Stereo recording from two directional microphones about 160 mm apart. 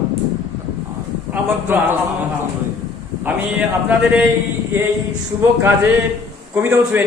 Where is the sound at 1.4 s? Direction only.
15° right (ahead or behind).